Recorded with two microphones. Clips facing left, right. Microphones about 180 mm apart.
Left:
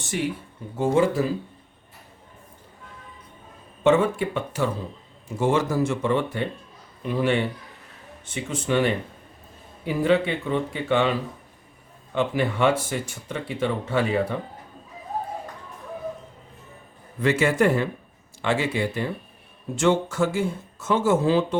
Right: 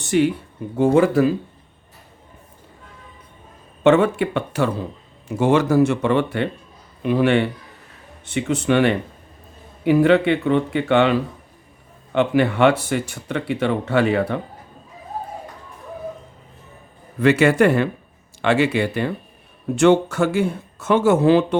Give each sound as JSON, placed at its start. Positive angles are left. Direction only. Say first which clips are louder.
{"t": 0.0, "sound": "speech", "louder": "right 9 dB", "side_deg": -65}
{"t": 3.8, "sound": "speech", "louder": "right 4 dB", "side_deg": -70}
{"t": 17.2, "sound": "speech", "louder": "right 6 dB", "side_deg": -70}